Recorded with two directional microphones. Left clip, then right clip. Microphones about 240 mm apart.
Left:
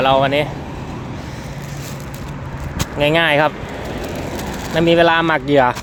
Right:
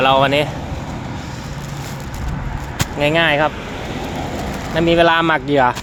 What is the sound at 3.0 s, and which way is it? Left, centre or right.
Speech, centre.